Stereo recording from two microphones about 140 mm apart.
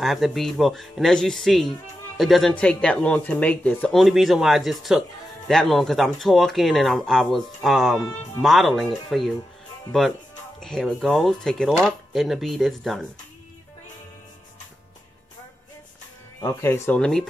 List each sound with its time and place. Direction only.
0.0 s speech: centre (ahead or behind)
16.3 s speech: 20° left (ahead or behind)
17.0 s speech: centre (ahead or behind)